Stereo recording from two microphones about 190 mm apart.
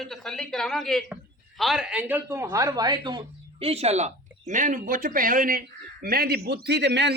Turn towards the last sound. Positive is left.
turn(degrees=-65)  # may be behind; listen again after turning